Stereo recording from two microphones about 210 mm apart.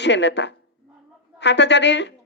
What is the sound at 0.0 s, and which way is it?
Speech, 55° left (ahead or behind).